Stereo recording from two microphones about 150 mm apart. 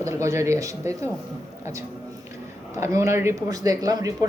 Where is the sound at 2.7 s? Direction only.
20° right (ahead or behind).